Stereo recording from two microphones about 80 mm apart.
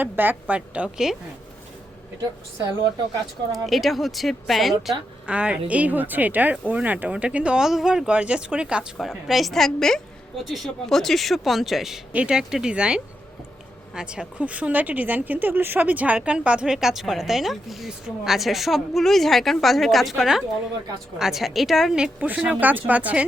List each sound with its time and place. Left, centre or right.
0.0 s a woman's voice: right
3.5 s speech: centre
5.2 s speech: centre